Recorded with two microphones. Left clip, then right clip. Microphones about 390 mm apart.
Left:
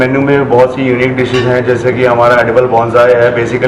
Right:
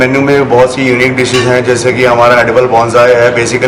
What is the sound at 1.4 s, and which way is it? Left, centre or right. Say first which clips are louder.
Speech: right 2 dB; centre.